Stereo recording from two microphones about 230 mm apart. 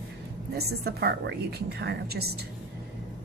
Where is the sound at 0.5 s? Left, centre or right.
Right.